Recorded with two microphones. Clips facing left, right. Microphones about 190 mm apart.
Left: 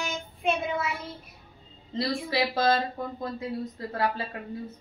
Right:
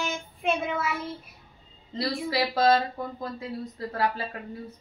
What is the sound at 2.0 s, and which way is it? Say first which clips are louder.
Speech: even; 25° left (ahead or behind).